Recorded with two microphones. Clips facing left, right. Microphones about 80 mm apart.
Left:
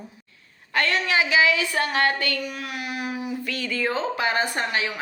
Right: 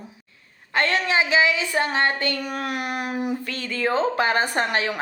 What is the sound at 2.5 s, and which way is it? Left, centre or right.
Child singing, right.